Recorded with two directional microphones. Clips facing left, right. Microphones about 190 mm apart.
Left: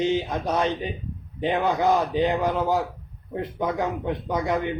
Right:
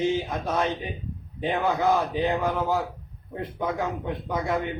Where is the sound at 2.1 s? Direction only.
15° left (ahead or behind).